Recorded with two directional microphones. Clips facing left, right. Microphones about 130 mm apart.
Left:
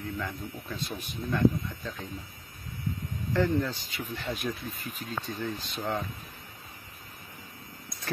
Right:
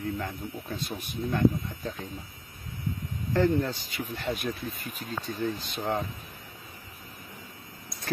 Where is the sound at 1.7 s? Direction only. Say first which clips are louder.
Right 2 dB; 40° right (ahead or behind).